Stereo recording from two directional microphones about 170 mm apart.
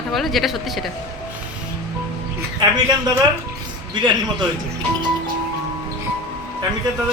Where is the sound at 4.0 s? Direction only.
25° right (ahead or behind).